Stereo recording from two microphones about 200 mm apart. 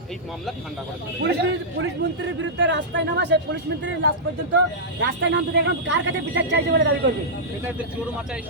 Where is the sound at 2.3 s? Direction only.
65° right (ahead or behind).